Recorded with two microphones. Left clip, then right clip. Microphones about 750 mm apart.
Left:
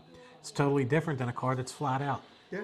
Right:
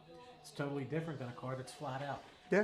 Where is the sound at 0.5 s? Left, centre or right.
Left.